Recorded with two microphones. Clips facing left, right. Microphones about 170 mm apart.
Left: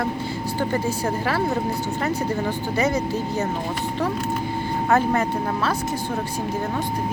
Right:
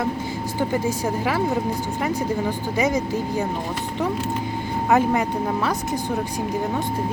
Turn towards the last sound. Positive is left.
turn(degrees=-15)  # may be behind; listen again after turning